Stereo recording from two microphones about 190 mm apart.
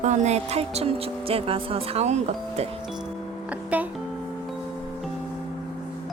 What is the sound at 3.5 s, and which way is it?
Music, 5° right (ahead or behind).